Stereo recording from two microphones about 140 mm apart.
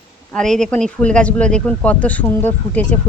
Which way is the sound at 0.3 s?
5° left (ahead or behind).